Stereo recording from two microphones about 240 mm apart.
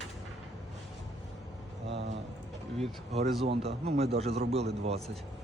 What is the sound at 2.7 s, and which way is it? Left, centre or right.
Speech, right.